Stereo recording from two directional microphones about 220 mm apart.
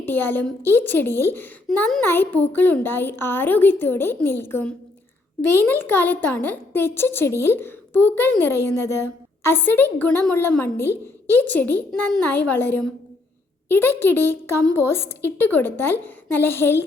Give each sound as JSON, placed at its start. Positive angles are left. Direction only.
{"t": 0.0, "sound": "a woman's voice", "side_deg": 10}